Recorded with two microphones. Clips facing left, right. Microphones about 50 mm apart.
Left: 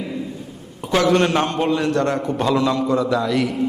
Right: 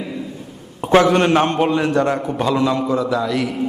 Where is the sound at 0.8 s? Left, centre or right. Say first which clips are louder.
Right 3 dB; right.